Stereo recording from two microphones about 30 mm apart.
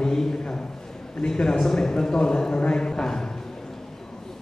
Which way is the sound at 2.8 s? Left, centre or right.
Left.